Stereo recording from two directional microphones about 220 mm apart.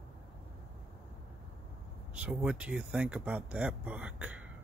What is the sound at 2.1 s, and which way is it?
Speech, 5° right (ahead or behind).